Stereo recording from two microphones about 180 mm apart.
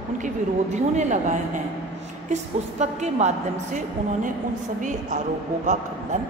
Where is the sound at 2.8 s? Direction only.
40° right (ahead or behind).